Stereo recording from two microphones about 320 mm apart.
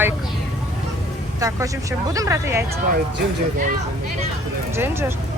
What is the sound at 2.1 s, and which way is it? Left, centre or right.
Speech, centre.